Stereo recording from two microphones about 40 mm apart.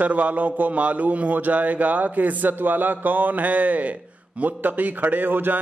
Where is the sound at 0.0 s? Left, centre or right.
Right.